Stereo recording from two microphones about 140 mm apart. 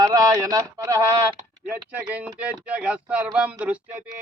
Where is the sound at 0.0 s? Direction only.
25° right (ahead or behind).